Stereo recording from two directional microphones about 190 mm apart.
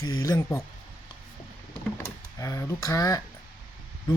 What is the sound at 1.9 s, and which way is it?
A man's voice, 15° left (ahead or behind).